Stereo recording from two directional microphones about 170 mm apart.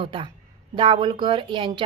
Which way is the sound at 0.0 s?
30° right (ahead or behind).